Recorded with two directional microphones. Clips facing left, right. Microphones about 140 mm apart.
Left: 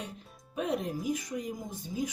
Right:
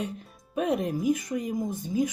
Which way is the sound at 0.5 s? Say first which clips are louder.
Right 5 dB; 60° right (ahead or behind).